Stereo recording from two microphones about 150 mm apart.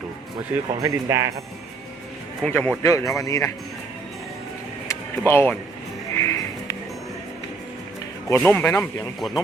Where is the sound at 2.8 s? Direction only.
20° left (ahead or behind).